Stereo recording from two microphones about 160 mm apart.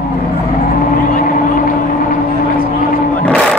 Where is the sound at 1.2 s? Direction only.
55° left (ahead or behind).